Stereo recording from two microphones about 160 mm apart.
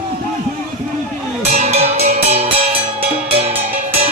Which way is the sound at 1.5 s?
45° right (ahead or behind).